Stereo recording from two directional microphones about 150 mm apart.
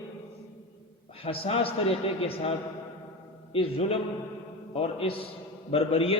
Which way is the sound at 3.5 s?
40° left (ahead or behind).